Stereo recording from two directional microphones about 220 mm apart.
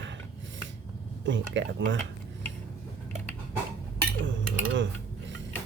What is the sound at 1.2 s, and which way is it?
Speech, 55° right (ahead or behind).